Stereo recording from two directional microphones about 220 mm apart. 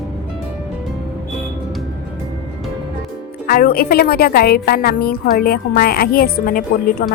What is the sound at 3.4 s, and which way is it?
A woman's voice, 40° left (ahead or behind).